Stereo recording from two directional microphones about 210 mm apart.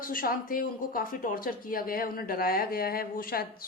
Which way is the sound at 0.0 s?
40° left (ahead or behind).